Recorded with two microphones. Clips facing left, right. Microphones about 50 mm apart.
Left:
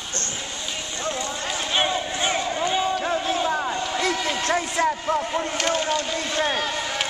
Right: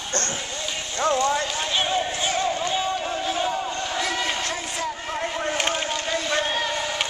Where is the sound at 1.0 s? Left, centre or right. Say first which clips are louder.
Right 8 dB; right.